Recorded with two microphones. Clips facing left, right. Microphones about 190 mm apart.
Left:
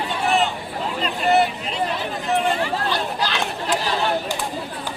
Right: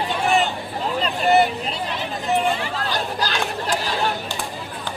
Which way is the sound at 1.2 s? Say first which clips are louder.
Right 1 dB; centre (ahead or behind).